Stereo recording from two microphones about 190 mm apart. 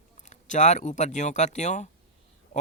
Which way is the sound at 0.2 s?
40° left (ahead or behind).